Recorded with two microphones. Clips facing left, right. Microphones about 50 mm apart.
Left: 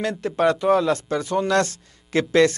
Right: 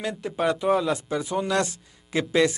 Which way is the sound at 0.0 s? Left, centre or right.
Centre.